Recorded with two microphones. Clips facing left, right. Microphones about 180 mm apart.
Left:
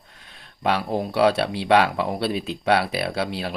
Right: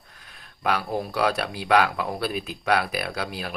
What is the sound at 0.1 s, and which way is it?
Speech, 25° left (ahead or behind).